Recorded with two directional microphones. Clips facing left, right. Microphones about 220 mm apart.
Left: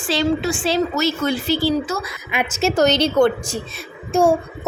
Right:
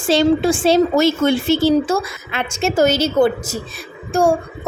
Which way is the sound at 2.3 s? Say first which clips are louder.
Left 2 dB; 10° left (ahead or behind).